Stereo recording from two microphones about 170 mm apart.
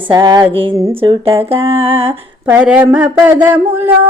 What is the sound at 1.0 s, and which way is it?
Speech, 30° right (ahead or behind).